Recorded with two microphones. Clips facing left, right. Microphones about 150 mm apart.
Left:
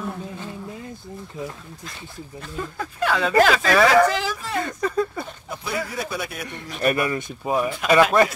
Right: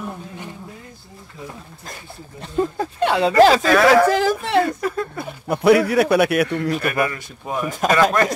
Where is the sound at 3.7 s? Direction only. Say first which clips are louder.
Right 3 dB; 5° right (ahead or behind).